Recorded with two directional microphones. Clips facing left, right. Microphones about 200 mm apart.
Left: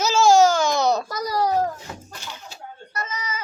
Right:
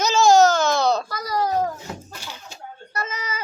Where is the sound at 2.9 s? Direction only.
30° right (ahead or behind).